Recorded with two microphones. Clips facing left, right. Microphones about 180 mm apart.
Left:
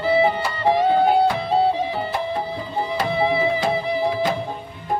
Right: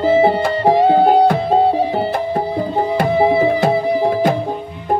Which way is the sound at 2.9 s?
45° right (ahead or behind).